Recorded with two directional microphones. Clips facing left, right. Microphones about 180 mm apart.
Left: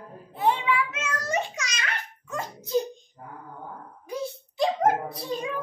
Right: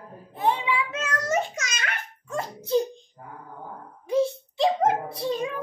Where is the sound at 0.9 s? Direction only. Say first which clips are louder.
Right 3 dB; 45° right (ahead or behind).